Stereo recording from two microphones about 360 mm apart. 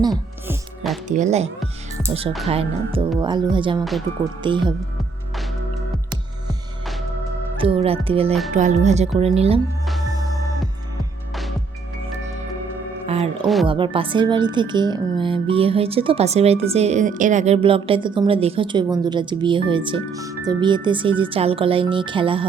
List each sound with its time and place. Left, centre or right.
0.0 s music: centre
1.0 s speech: centre
7.6 s speech: centre
10.1 s music: centre
13.1 s music: centre
13.7 s speech: centre